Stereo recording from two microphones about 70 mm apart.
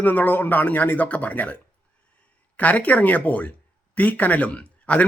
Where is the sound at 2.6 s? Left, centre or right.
Left.